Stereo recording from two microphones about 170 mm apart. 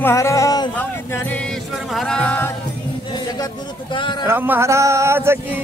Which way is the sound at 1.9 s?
5° left (ahead or behind).